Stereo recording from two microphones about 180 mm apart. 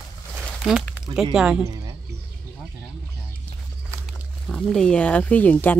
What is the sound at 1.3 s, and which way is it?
Speech, 5° right (ahead or behind).